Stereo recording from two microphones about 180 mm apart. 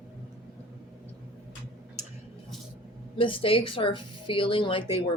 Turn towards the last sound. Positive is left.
turn(degrees=30)  # may be behind; listen again after turning